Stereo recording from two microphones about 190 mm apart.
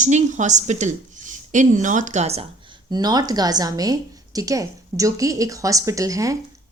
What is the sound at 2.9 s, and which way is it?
A woman's voice, 20° right (ahead or behind).